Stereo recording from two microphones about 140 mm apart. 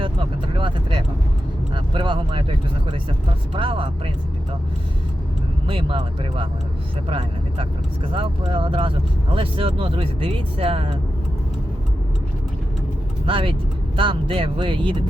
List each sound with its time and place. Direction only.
0.0 s vehicle: 35° right (ahead or behind)
1.7 s speech: 35° right (ahead or behind)
3.5 s speech: 40° right (ahead or behind)
5.6 s speech: 40° right (ahead or behind)
7.1 s speech: 40° right (ahead or behind)
13.2 s speech: 40° right (ahead or behind)